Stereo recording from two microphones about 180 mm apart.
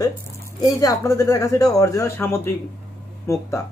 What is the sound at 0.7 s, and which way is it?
Speech, 20° left (ahead or behind).